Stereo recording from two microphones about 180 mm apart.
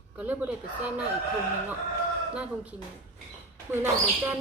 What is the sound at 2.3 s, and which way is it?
Speech, 5° right (ahead or behind).